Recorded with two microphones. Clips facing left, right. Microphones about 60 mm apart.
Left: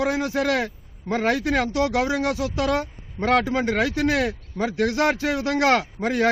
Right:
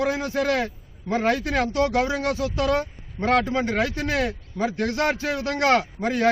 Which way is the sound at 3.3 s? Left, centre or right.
Centre.